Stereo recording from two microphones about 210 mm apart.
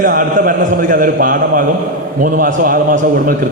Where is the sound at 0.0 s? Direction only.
40° right (ahead or behind).